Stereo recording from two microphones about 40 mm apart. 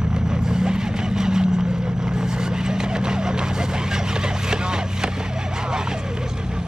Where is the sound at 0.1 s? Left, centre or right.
Centre.